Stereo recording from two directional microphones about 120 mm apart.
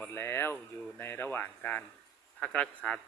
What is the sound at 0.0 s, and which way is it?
Speech, 20° left (ahead or behind).